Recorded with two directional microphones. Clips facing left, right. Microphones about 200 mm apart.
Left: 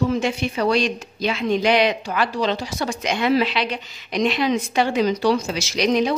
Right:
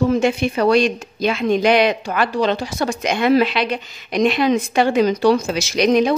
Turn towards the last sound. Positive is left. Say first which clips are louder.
# right 4 dB
turn(degrees=-50)  # may be behind; listen again after turning